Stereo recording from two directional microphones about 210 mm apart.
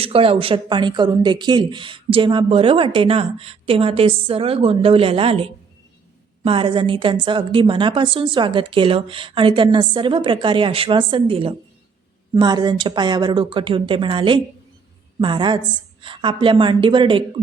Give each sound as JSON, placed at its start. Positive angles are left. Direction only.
{"t": 0.0, "sound": "speech", "side_deg": -25}